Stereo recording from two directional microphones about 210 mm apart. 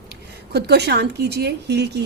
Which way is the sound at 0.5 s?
50° right (ahead or behind).